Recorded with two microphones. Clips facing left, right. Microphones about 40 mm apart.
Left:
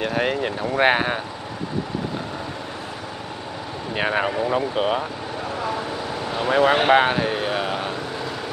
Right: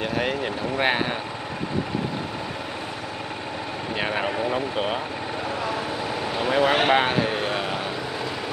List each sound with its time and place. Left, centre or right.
0.0 s speech: centre
3.9 s speech: centre
5.6 s vehicle: centre